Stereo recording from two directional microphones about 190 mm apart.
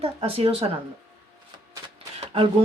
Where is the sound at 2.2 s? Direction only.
30° right (ahead or behind).